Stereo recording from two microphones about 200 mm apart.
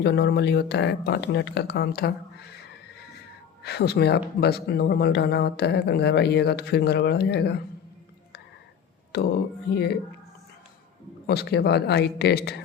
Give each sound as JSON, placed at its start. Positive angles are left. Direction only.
{"t": 0.0, "sound": "speech", "side_deg": 55}
{"t": 3.6, "sound": "speech", "side_deg": 55}
{"t": 9.1, "sound": "speech", "side_deg": 55}
{"t": 11.3, "sound": "speech", "side_deg": 55}